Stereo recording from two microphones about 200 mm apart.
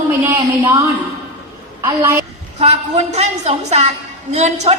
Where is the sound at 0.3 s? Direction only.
10° right (ahead or behind).